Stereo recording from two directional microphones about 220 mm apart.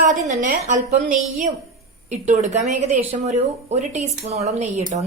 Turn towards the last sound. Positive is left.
turn(degrees=-30)  # may be behind; listen again after turning